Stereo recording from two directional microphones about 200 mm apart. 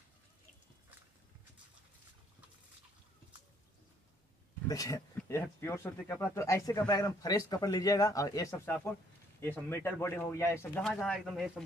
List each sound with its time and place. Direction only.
4.6 s speech: 15° left (ahead or behind)
10.8 s speech: centre (ahead or behind)